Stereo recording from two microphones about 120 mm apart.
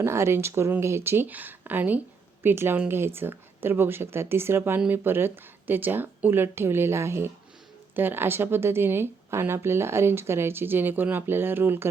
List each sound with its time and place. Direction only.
0.0 s speech: 20° right (ahead or behind)